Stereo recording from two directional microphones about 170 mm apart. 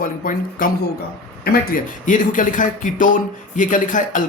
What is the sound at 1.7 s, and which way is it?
Speech, 50° left (ahead or behind).